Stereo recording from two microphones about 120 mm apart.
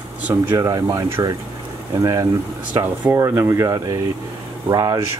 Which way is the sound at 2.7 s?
15° right (ahead or behind).